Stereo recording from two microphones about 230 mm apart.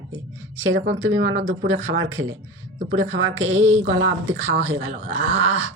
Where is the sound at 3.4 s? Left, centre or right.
Right.